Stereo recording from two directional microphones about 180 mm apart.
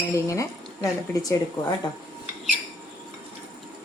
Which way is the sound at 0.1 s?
15° left (ahead or behind).